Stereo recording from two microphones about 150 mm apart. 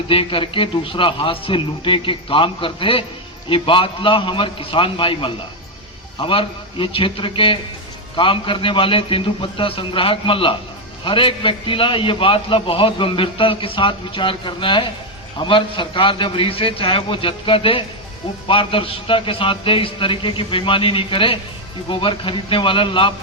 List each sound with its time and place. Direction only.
0.1 s a man's voice: 35° left (ahead or behind)